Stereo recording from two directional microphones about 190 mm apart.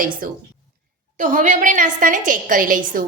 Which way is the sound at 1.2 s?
40° right (ahead or behind).